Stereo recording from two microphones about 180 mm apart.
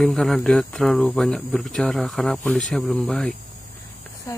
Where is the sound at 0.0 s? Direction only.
Centre (ahead or behind).